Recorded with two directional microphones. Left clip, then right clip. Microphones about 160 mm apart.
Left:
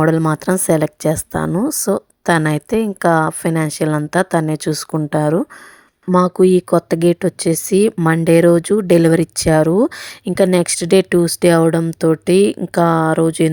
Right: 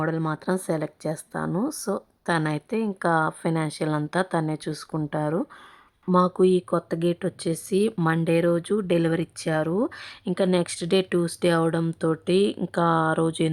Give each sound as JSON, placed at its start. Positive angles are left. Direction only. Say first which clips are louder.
{"t": 0.2, "sound": "speech", "louder": "left 10 dB", "side_deg": 40}